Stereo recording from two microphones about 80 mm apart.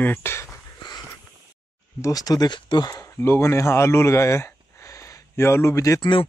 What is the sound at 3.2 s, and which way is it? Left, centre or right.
Speech, left.